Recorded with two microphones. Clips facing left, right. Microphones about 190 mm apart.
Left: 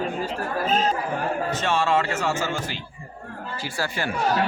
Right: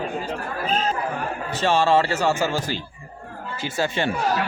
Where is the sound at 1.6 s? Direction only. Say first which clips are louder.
Right 6 dB; 30° right (ahead or behind).